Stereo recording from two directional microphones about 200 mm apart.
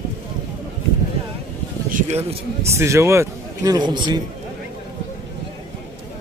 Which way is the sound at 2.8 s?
15° right (ahead or behind).